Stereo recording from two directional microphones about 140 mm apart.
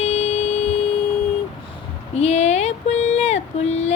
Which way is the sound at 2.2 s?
50° left (ahead or behind).